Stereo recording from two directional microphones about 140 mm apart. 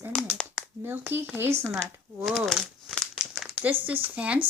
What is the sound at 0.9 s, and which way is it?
Speech, 15° right (ahead or behind).